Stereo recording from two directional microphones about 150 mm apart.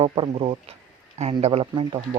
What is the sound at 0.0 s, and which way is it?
Speech, 40° right (ahead or behind).